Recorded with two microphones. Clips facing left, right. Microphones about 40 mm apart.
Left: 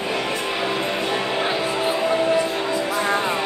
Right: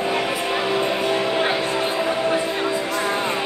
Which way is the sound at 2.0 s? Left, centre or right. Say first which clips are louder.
Left 1 dB; centre.